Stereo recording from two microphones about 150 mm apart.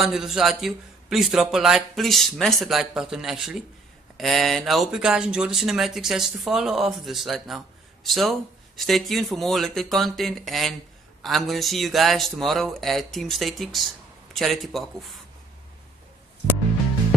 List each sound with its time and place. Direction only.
0.0 s speech: 5° right (ahead or behind)